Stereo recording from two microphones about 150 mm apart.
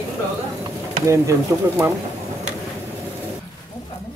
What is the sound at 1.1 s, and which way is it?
Speech, 20° right (ahead or behind).